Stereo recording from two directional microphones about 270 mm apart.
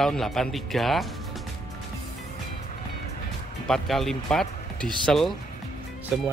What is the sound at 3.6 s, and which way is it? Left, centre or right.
Speech, centre.